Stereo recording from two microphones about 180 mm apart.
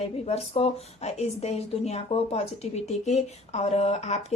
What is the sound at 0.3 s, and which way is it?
Speech, 35° left (ahead or behind).